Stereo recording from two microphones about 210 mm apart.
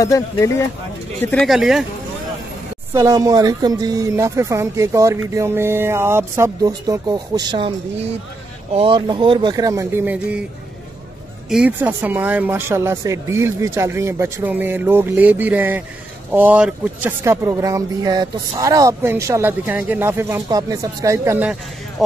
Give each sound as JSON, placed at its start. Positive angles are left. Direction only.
{"t": 0.0, "sound": "speech", "side_deg": 15}
{"t": 1.2, "sound": "speech", "side_deg": 5}
{"t": 2.9, "sound": "speech", "side_deg": -15}
{"t": 11.4, "sound": "speech", "side_deg": -5}